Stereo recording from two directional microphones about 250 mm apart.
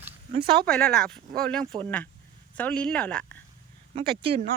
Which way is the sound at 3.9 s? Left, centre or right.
Right.